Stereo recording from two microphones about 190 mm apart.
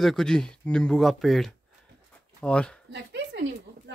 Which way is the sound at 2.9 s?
65° right (ahead or behind).